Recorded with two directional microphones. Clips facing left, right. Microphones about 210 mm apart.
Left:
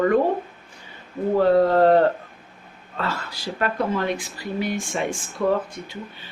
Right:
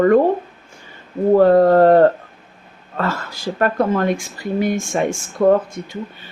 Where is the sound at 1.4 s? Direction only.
50° right (ahead or behind).